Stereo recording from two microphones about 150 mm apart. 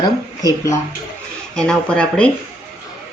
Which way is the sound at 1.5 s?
5° left (ahead or behind).